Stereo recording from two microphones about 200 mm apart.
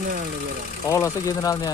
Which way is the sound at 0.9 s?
15° left (ahead or behind).